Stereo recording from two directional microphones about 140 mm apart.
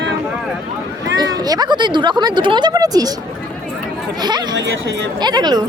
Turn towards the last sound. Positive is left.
turn(degrees=-30)  # may be behind; listen again after turning